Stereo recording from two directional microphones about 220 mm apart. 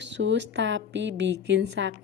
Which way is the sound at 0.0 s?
55° right (ahead or behind).